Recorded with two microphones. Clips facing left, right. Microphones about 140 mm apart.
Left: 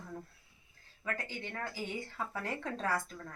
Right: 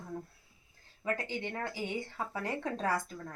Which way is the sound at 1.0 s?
20° right (ahead or behind).